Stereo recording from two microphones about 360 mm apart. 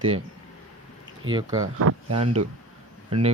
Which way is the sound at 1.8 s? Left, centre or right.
Right.